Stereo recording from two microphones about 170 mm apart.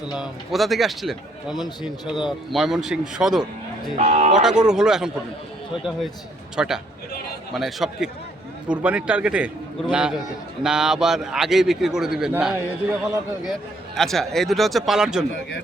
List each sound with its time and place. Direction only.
0.1 s a man's voice: centre (ahead or behind)
3.9 s speech: 40° right (ahead or behind)
4.4 s a man's voice: 5° right (ahead or behind)
6.6 s a man's voice: 5° right (ahead or behind)